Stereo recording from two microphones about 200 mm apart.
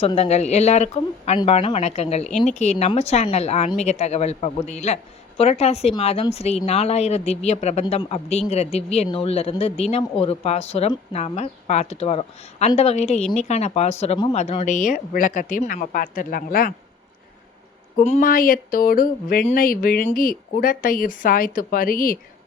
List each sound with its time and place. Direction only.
0.0 s speech: 30° left (ahead or behind)
17.9 s speech: 40° left (ahead or behind)